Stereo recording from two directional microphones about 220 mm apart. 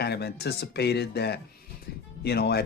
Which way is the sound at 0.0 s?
45° left (ahead or behind).